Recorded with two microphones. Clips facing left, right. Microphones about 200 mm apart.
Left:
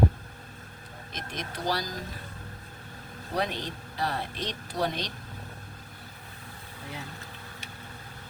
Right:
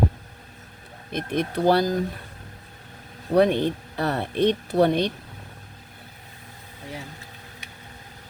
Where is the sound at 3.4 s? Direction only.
55° right (ahead or behind).